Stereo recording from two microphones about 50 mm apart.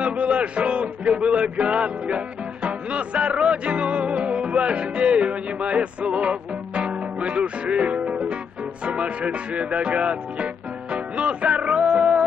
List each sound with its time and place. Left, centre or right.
0.0 s speech: right
8.8 s music: right